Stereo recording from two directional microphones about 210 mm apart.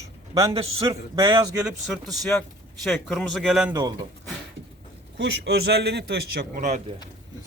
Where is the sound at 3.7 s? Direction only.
20° right (ahead or behind).